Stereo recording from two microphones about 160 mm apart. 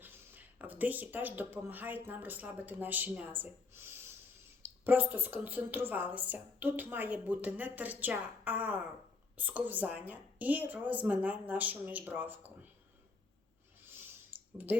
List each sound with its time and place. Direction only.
0.0 s a woman's voice: 10° right (ahead or behind)